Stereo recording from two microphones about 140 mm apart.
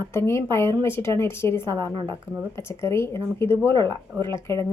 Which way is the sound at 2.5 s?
20° left (ahead or behind).